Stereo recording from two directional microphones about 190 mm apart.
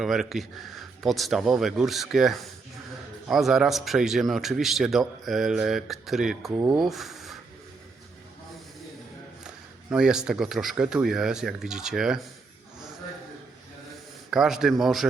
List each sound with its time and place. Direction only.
0.0 s a man's voice: centre (ahead or behind)
9.9 s a man's voice: 5° right (ahead or behind)
14.3 s a man's voice: centre (ahead or behind)